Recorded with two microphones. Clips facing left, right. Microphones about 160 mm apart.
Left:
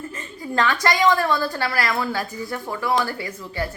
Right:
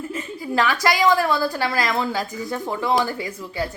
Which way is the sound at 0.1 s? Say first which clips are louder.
Right 3 dB; 10° right (ahead or behind).